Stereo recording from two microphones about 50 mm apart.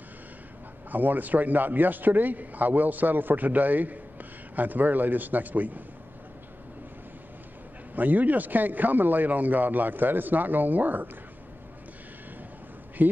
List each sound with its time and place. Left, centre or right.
0.9 s a man's voice: right
7.9 s a man's voice: right
13.0 s a man's voice: right